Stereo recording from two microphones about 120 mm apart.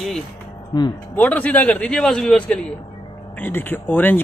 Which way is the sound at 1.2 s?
10° left (ahead or behind).